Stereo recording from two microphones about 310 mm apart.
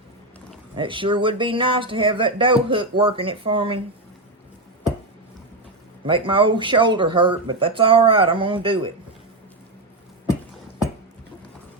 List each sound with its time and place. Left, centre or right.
0.8 s speech: centre
6.1 s speech: centre